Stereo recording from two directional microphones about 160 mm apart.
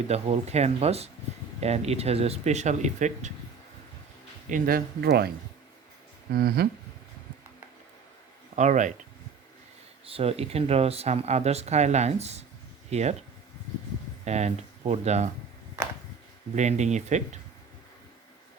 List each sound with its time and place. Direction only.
0.1 s speech: 40° right (ahead or behind)
4.4 s speech: 60° right (ahead or behind); by 5.3 s 85° right
6.3 s speech: 80° right
8.5 s speech: 50° right (ahead or behind)
10.1 s speech: 40° right (ahead or behind)
14.3 s speech: 45° right (ahead or behind)
16.6 s speech: 45° right (ahead or behind)